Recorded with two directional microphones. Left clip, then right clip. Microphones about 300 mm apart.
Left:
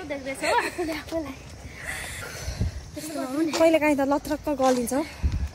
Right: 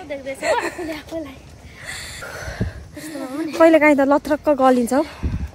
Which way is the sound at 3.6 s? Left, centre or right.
Right.